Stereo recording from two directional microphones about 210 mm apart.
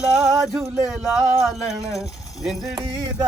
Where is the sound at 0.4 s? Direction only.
Centre (ahead or behind).